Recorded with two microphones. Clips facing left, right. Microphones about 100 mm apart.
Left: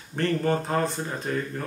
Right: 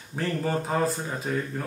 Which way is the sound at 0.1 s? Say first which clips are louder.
Left 3 dB; 5° right (ahead or behind).